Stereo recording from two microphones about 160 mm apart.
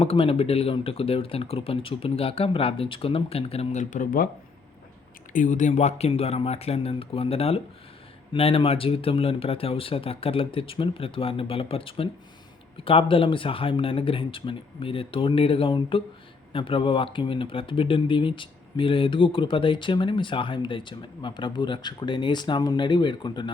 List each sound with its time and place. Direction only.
0.0 s speech: 35° left (ahead or behind); by 4.3 s 55° left (ahead or behind)
5.3 s speech: 55° left (ahead or behind); by 23.5 s 30° left (ahead or behind)